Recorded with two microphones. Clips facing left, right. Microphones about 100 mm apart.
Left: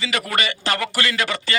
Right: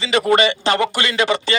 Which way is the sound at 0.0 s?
25° right (ahead or behind).